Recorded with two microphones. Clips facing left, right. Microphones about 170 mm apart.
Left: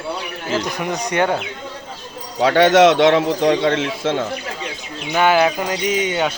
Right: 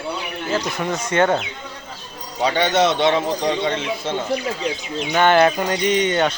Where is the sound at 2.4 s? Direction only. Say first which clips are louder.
Left 6 dB; 90° left.